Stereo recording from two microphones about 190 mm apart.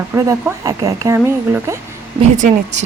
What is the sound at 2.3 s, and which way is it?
Speech, 40° right (ahead or behind).